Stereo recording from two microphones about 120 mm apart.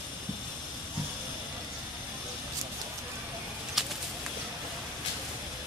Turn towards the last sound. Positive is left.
turn(degrees=0)  # may be behind; listen again after turning